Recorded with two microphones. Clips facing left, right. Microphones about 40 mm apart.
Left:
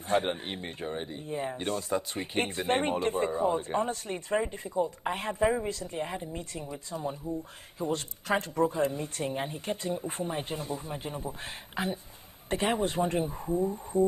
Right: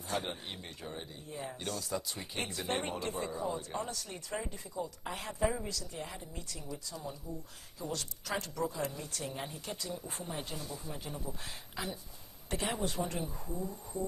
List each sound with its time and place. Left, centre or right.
0.1 s speech: left